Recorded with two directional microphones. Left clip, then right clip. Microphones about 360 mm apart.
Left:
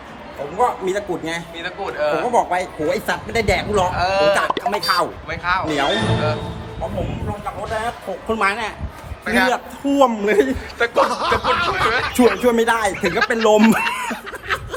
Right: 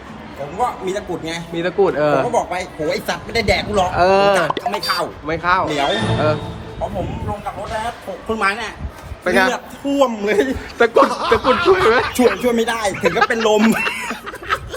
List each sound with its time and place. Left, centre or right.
0.9 s a man's voice: centre
8.3 s speech: centre
9.2 s a man's voice: centre